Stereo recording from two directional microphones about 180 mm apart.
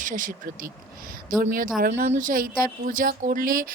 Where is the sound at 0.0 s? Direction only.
45° right (ahead or behind).